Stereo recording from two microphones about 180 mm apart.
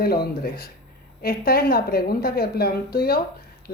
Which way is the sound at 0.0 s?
60° left (ahead or behind).